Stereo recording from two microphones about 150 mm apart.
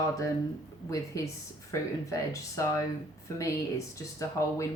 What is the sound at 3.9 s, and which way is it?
Speech, 20° left (ahead or behind).